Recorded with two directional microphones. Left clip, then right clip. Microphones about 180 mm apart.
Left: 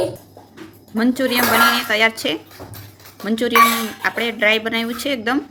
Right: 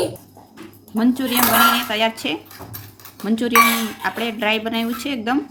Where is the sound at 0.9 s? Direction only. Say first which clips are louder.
Left 2 dB; 5° left (ahead or behind).